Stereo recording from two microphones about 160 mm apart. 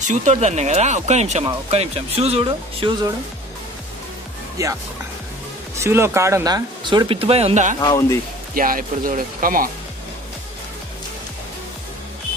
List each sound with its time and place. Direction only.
0.0 s speech: 50° right (ahead or behind); by 3.1 s 30° right (ahead or behind)
4.6 s speech: 20° right (ahead or behind)
5.8 s speech: 15° right (ahead or behind); by 7.7 s 45° right (ahead or behind)
7.8 s speech: 20° left (ahead or behind)
8.5 s speech: 60° right (ahead or behind)